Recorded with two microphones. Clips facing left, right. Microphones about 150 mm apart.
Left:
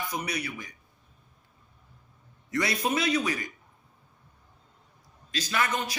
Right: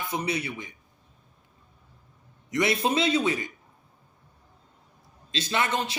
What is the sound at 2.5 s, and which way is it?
A man's voice, 25° right (ahead or behind).